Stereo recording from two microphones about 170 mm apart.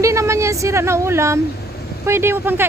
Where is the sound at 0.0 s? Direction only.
15° right (ahead or behind).